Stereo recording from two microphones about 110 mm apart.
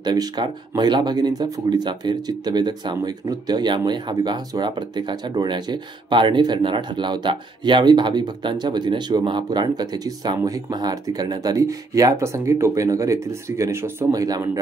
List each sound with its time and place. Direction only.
0.0 s speech: 40° right (ahead or behind)